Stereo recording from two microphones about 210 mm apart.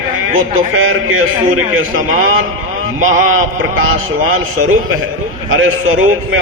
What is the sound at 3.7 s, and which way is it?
Speech, 70° right (ahead or behind).